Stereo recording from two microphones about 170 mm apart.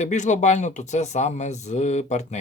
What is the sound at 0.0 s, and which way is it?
Speech, 45° left (ahead or behind).